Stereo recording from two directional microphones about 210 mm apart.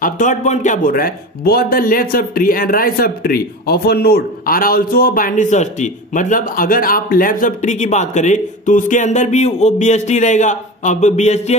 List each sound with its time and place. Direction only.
0.0 s a man's voice: 35° left (ahead or behind)